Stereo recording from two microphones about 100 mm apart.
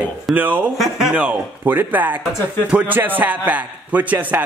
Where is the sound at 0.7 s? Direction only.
5° right (ahead or behind).